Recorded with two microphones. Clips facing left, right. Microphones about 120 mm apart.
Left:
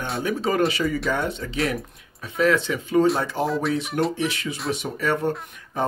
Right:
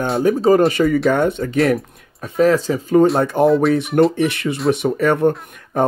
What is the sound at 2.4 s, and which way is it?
Speech, 40° right (ahead or behind).